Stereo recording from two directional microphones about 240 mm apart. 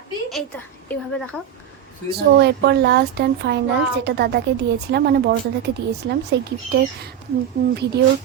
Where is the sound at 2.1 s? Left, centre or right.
Right.